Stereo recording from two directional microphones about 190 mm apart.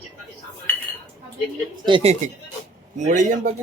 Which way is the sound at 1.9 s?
30° right (ahead or behind).